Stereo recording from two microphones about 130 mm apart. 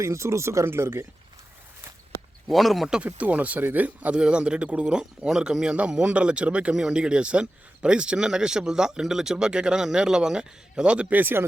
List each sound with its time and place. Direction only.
0.0 s speech: 20° right (ahead or behind)
2.5 s speech: centre (ahead or behind); by 11.4 s 15° right (ahead or behind)